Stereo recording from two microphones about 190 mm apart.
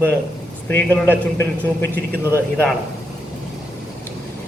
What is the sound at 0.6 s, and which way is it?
A man's voice, 10° left (ahead or behind).